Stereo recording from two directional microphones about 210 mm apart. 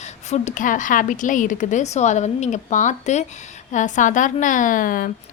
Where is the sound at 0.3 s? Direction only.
35° left (ahead or behind).